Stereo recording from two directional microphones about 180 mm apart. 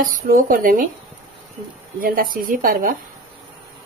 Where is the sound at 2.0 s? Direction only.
50° right (ahead or behind).